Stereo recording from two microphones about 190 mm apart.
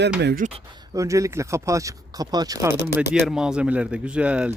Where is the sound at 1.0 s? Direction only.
15° right (ahead or behind).